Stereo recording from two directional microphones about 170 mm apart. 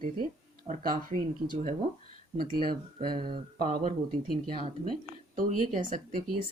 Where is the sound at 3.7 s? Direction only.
45° right (ahead or behind).